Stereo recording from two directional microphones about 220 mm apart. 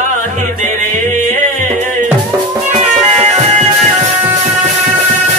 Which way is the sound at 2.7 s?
30° right (ahead or behind).